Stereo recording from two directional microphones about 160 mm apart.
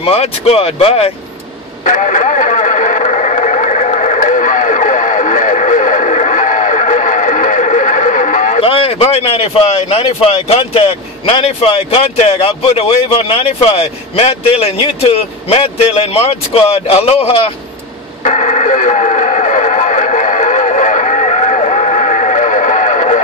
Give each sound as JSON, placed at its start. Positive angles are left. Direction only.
{"t": 0.0, "sound": "a man's voice", "side_deg": 40}
{"t": 1.9, "sound": "radio", "side_deg": 50}
{"t": 8.5, "sound": "a man's voice", "side_deg": 35}
{"t": 18.2, "sound": "radio", "side_deg": 50}